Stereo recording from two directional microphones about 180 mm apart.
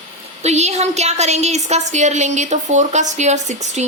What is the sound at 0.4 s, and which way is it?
A woman's voice, 40° right (ahead or behind).